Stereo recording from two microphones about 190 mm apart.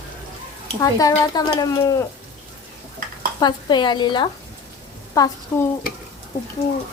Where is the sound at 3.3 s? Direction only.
25° left (ahead or behind).